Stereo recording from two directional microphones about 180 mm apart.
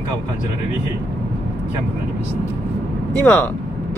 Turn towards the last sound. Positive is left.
turn(degrees=10)  # may be behind; listen again after turning